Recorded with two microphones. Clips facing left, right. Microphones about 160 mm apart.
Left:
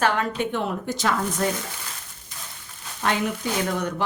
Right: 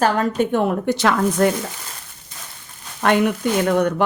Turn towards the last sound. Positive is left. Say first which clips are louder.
# right 8 dB
turn(degrees=-60)  # may be behind; listen again after turning